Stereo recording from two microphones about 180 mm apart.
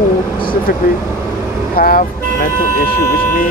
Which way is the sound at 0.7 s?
50° left (ahead or behind).